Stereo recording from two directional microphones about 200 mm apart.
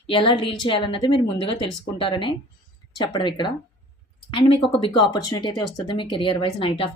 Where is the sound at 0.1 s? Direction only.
25° left (ahead or behind).